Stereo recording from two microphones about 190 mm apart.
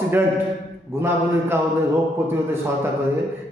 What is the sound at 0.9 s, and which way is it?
Speech, 15° right (ahead or behind).